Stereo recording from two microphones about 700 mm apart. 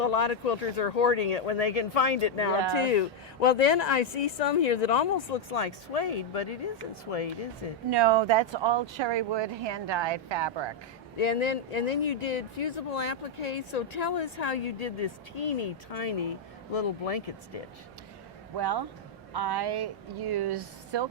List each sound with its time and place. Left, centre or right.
0.0 s speech: left
7.9 s speech: right
11.2 s speech: left
18.5 s speech: right